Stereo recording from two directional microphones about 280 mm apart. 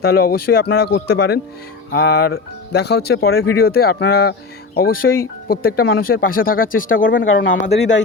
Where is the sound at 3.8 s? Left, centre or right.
Left.